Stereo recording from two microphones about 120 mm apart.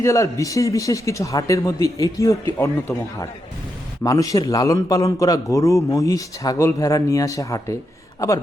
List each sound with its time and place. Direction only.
0.0 s a man's voice: 25° left (ahead or behind)
4.0 s a man's voice: 30° left (ahead or behind)